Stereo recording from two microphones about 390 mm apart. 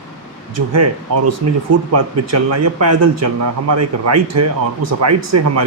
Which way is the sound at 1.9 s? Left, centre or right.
Right.